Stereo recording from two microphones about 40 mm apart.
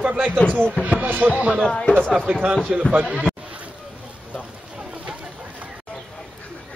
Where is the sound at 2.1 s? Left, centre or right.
Right.